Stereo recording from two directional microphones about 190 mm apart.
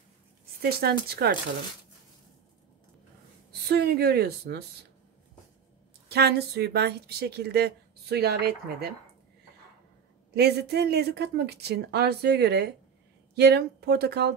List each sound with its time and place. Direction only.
0.6 s speech: 55° right (ahead or behind)
3.6 s speech: 55° right (ahead or behind)
6.0 s speech: 60° right (ahead or behind)
10.3 s speech: 60° right (ahead or behind)